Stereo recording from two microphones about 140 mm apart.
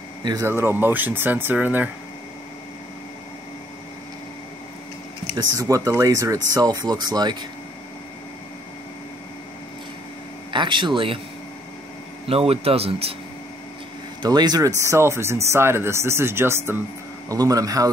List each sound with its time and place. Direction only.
0.2 s speech: 30° right (ahead or behind)
0.5 s speech: 15° right (ahead or behind)
5.3 s speech: 25° right (ahead or behind)
10.5 s speech: 35° right (ahead or behind)
12.3 s speech: 45° right (ahead or behind)
14.2 s speech: 30° right (ahead or behind)